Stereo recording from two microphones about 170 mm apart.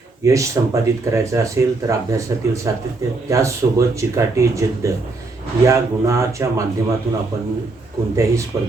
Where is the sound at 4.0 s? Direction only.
20° right (ahead or behind).